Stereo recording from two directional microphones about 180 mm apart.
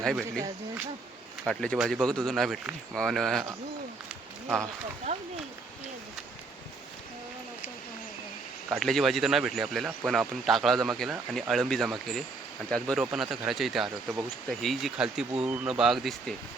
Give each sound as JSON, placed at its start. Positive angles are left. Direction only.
{"t": 0.0, "sound": "speech", "side_deg": 0}
{"t": 1.5, "sound": "speech", "side_deg": 5}
{"t": 5.1, "sound": "speech", "side_deg": -40}
{"t": 8.7, "sound": "speech", "side_deg": 0}